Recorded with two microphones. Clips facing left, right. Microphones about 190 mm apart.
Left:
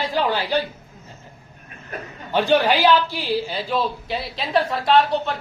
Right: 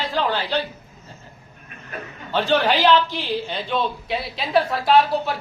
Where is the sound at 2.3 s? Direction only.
10° left (ahead or behind); by 5.4 s 5° right (ahead or behind).